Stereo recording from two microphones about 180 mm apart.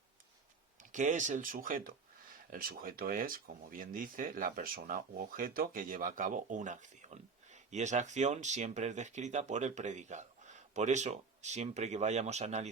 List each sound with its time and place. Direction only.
0.8 s speech: 45° right (ahead or behind)